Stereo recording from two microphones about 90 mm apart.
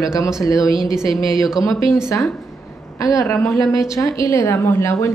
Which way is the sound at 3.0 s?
40° left (ahead or behind).